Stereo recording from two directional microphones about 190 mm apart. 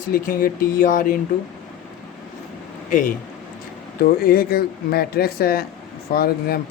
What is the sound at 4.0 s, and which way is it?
Speech, 50° left (ahead or behind).